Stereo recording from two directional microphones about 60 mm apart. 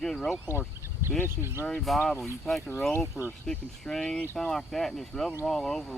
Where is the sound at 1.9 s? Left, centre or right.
Centre.